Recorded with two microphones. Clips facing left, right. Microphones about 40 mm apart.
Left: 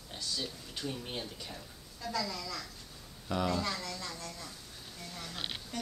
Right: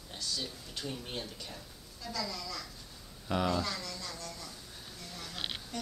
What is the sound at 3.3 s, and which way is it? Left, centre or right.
Speech, centre.